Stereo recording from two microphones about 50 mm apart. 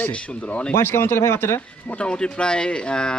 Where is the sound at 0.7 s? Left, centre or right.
Left.